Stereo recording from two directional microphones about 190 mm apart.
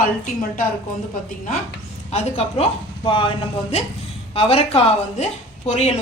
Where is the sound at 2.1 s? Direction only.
35° left (ahead or behind).